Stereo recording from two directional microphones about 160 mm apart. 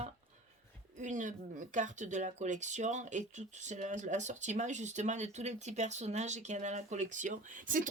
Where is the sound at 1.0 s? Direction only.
50° right (ahead or behind).